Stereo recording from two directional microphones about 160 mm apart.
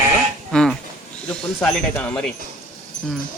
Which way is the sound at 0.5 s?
5° left (ahead or behind).